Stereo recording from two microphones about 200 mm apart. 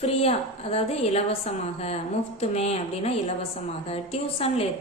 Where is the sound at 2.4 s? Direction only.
30° left (ahead or behind).